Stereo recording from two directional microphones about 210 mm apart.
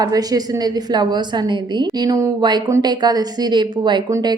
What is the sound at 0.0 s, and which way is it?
A woman's voice, 20° right (ahead or behind).